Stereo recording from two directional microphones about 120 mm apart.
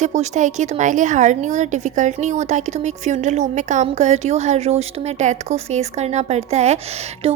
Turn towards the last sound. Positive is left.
turn(degrees=-60)  # may be behind; listen again after turning